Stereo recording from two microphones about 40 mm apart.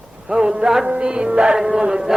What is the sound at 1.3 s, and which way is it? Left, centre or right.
Music, right.